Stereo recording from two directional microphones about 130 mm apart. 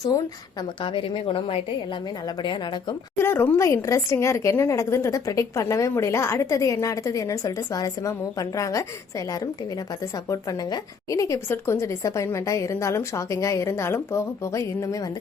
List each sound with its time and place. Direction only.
0.9 s a woman's voice: 45° left (ahead or behind)
3.2 s speech: 15° left (ahead or behind)
10.7 s speech: 25° left (ahead or behind)